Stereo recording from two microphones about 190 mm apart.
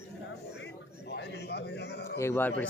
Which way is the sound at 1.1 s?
60° left (ahead or behind).